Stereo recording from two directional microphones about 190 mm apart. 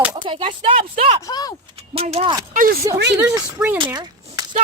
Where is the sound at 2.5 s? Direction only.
45° right (ahead or behind).